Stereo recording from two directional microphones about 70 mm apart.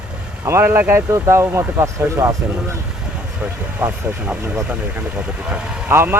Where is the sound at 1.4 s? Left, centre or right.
Right.